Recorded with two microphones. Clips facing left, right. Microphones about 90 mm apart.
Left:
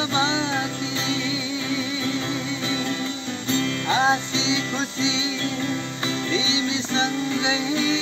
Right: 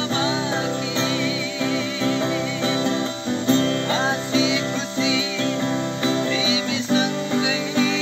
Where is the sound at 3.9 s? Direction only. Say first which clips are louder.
Left 1 dB; 20° left (ahead or behind).